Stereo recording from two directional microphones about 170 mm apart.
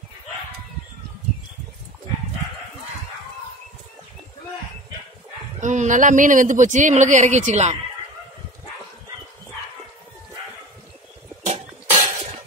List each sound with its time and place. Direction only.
5.6 s speech: 45° right (ahead or behind)
11.4 s cough: 45° right (ahead or behind)